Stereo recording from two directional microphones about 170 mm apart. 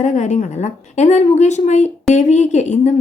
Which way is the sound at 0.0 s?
45° left (ahead or behind).